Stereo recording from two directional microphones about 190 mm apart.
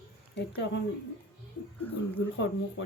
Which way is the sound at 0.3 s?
65° left (ahead or behind).